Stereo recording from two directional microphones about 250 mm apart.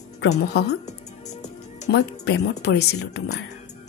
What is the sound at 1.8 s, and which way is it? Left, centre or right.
Speech, left.